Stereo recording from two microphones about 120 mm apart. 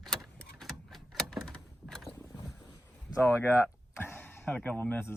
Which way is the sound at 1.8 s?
Centre (ahead or behind).